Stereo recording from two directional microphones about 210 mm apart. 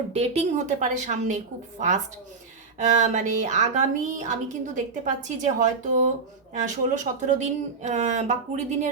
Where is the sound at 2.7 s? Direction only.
35° right (ahead or behind).